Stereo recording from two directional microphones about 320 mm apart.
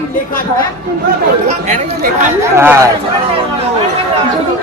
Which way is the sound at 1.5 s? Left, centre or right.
Right.